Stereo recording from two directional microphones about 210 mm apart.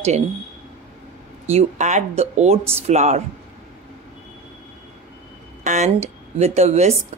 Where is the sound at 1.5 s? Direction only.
35° right (ahead or behind).